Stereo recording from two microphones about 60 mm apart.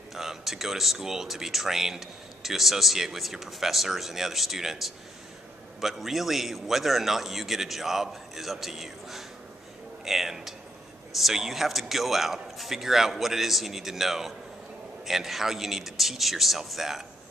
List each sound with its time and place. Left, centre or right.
0.1 s speech: centre